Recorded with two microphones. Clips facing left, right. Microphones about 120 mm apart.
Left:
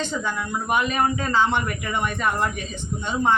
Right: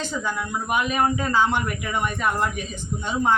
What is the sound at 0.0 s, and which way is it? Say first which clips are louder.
Speech: left 1 dB; 10° right (ahead or behind).